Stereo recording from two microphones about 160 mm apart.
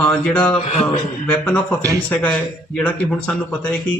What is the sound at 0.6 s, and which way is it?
Speech, 45° left (ahead or behind).